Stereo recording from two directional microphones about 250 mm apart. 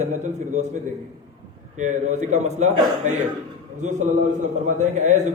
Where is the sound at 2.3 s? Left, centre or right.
Right.